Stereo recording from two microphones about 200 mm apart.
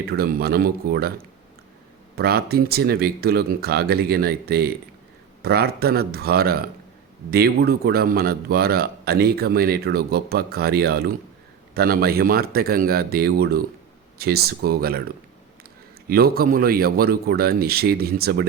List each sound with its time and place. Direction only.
0.0 s a man's voice: 50° right (ahead or behind)
2.1 s a man's voice: 50° right (ahead or behind)
16.0 s a man's voice: 50° right (ahead or behind)